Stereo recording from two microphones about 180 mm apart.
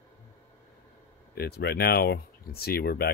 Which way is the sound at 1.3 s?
60° left (ahead or behind).